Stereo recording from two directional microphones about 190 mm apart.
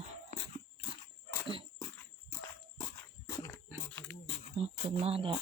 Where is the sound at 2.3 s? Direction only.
15° left (ahead or behind).